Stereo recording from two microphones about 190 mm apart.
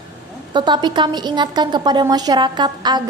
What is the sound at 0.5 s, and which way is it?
A woman's voice, 25° right (ahead or behind).